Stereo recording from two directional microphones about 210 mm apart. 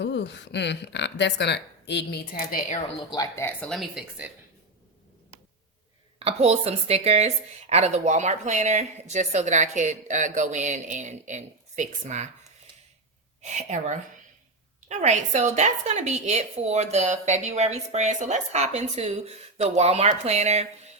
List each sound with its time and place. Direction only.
0.0 s speech: 55° left (ahead or behind); by 2.8 s 40° left (ahead or behind)
3.1 s speech: 15° left (ahead or behind); by 4.3 s centre (ahead or behind)
6.1 s a woman's voice: 30° right (ahead or behind)
13.4 s a woman's voice: 35° right (ahead or behind)